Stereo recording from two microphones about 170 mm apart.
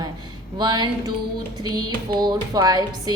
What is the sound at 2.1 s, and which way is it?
A woman's voice, 25° right (ahead or behind).